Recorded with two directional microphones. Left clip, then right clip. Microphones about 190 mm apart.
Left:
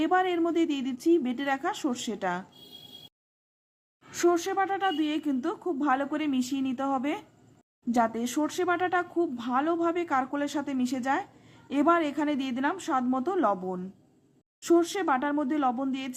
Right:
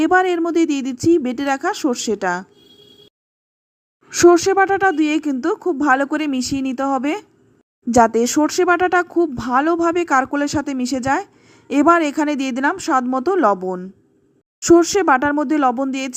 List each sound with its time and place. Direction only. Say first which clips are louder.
0.0 s speech: right 10 dB; 30° right (ahead or behind)
4.1 s speech: right 14 dB; 35° right (ahead or behind)